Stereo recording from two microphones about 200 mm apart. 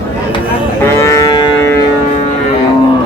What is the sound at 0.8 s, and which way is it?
Cattle, 15° left (ahead or behind).